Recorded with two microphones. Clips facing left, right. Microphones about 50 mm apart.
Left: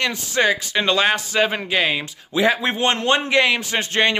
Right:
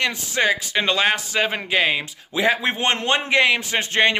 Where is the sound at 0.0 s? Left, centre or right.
Centre.